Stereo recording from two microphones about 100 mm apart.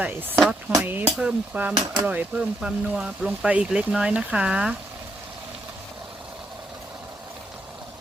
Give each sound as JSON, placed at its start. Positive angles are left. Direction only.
{"t": 0.8, "sound": "speech", "side_deg": -20}